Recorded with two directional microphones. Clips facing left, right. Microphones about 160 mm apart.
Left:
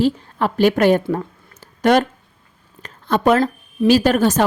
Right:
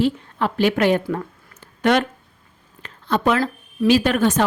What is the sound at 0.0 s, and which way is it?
A woman's voice, 45° left (ahead or behind).